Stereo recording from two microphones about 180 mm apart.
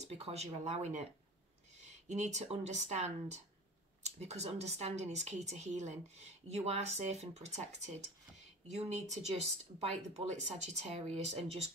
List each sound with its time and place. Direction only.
0.0 s speech: 35° right (ahead or behind)